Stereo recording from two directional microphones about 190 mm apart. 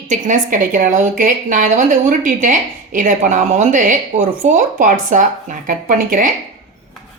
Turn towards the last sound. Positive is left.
turn(degrees=-45)  # may be behind; listen again after turning